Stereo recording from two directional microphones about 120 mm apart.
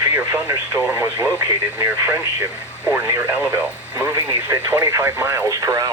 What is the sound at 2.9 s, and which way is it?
Speech, 20° right (ahead or behind).